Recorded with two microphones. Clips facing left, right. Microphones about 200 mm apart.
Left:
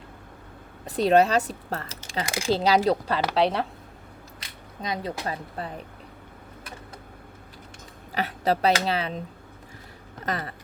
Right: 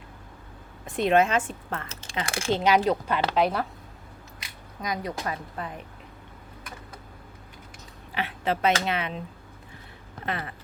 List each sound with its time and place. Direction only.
0.9 s speech: 35° left (ahead or behind)
2.2 s speech: 15° left (ahead or behind)
2.5 s speech: 35° left (ahead or behind)
4.8 s speech: 25° left (ahead or behind)
8.1 s speech: 40° left (ahead or behind)
10.2 s speech: 40° left (ahead or behind)